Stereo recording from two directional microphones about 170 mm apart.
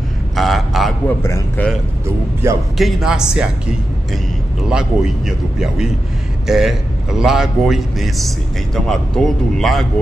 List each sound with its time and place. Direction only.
0.4 s a sound: centre (ahead or behind)
2.4 s a man's voice: 15° right (ahead or behind)
2.8 s a man's voice: 5° right (ahead or behind)
4.6 s a man's voice: centre (ahead or behind)